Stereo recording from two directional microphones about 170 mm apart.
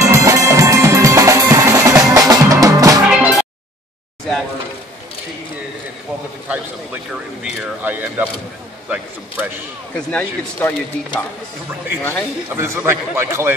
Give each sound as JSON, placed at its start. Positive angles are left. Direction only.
{"t": 0.0, "sound": "music", "side_deg": -20}
{"t": 3.1, "sound": "music", "side_deg": -5}
{"t": 6.5, "sound": "speech", "side_deg": -5}
{"t": 9.9, "sound": "speech", "side_deg": 5}
{"t": 12.0, "sound": "speech", "side_deg": 10}
{"t": 12.5, "sound": "speech", "side_deg": -15}